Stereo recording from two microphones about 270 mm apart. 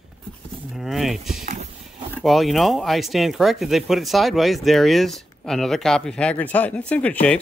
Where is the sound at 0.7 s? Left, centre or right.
Centre.